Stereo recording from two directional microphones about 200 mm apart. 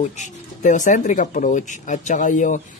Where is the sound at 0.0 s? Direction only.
40° left (ahead or behind).